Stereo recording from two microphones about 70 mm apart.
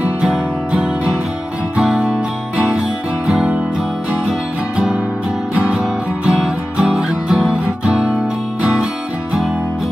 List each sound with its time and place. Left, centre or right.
0.2 s music: centre
4.7 s music: centre
5.8 s music: centre